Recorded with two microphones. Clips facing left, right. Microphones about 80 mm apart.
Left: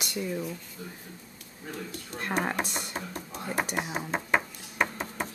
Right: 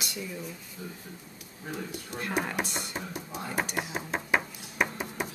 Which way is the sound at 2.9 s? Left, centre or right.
Centre.